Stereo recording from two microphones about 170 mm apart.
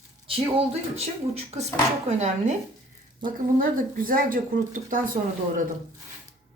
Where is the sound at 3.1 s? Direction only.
55° right (ahead or behind).